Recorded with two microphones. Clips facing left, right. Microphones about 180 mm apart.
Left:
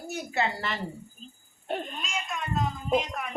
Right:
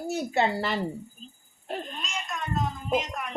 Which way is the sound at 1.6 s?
Centre (ahead or behind).